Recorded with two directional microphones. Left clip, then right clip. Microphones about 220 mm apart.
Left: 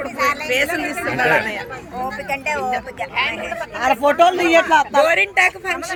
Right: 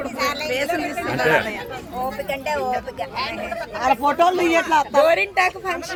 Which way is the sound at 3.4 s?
40° left (ahead or behind).